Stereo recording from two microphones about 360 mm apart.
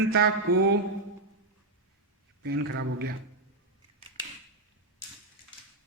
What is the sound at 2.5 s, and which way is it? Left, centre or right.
Speech, right.